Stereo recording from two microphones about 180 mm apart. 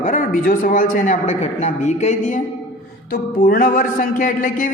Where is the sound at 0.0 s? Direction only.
50° left (ahead or behind).